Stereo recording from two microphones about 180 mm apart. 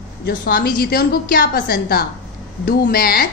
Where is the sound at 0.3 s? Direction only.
50° left (ahead or behind).